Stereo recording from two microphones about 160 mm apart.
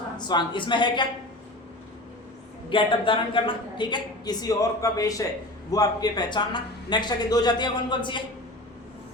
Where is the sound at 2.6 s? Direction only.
30° left (ahead or behind).